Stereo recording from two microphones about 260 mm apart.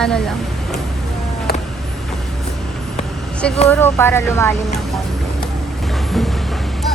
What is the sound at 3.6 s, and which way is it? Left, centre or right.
Speech, centre.